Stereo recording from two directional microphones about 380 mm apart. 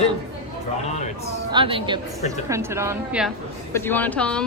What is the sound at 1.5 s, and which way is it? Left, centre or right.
A woman's voice, centre.